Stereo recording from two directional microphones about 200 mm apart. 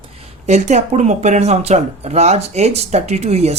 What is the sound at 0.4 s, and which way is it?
Speech, 35° right (ahead or behind).